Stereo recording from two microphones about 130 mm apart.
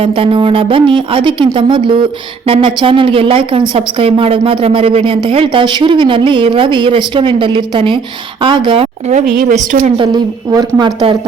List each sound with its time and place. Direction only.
0.0 s a woman's voice: 45° right (ahead or behind)
9.1 s speech: 75° right (ahead or behind)
10.0 s a woman's voice: 35° right (ahead or behind)